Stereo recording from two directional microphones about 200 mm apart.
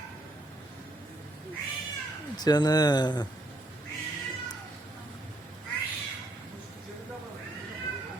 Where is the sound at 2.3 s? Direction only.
20° left (ahead or behind).